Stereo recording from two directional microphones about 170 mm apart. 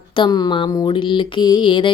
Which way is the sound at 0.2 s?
25° left (ahead or behind).